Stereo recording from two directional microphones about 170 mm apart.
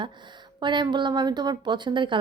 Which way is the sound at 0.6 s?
25° right (ahead or behind).